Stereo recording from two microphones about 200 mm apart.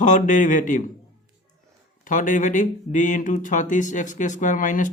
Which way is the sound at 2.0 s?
40° left (ahead or behind).